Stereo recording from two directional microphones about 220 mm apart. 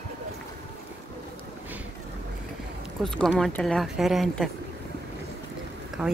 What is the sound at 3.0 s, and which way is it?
Speech, centre (ahead or behind).